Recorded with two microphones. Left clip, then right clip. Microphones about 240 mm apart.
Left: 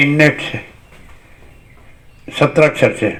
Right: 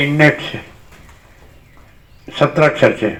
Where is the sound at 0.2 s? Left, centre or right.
Left.